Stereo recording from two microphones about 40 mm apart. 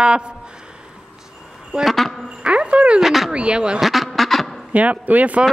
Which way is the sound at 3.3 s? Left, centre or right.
Right.